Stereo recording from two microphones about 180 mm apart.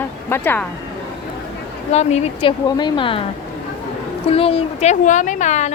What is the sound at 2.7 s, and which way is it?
Speech, 25° left (ahead or behind).